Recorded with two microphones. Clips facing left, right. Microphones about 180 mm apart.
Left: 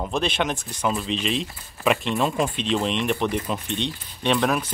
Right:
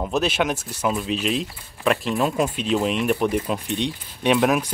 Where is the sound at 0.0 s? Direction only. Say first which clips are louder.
Right 2 dB; 5° right (ahead or behind).